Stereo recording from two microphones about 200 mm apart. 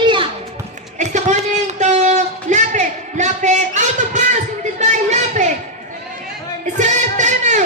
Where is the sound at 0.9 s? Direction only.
35° right (ahead or behind).